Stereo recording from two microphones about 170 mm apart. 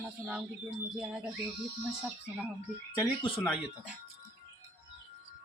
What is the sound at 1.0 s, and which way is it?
Speech, 5° right (ahead or behind).